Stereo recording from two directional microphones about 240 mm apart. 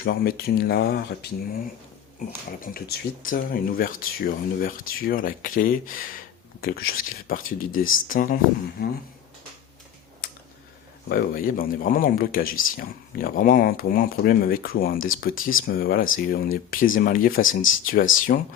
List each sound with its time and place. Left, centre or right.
0.0 s speech: left
2.7 s speech: left
10.2 s a sound: left
11.1 s speech: left